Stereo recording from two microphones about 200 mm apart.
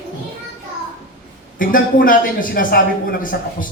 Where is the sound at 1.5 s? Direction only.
45° left (ahead or behind).